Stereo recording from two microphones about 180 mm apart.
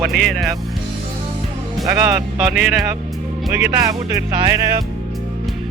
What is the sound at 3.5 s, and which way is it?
Speech, 15° right (ahead or behind).